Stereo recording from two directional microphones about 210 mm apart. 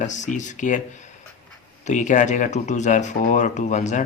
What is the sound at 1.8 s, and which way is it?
Speech, 35° left (ahead or behind).